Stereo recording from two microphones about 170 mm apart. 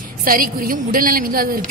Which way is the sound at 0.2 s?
55° right (ahead or behind).